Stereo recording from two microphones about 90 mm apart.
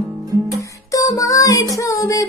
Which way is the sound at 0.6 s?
40° left (ahead or behind).